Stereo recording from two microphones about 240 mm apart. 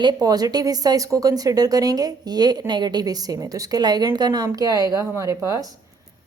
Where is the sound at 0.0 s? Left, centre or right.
Centre.